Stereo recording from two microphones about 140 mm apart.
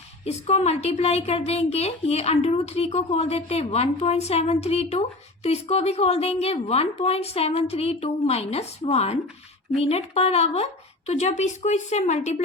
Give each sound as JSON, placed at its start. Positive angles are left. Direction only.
{"t": 0.3, "sound": "a woman's voice", "side_deg": 50}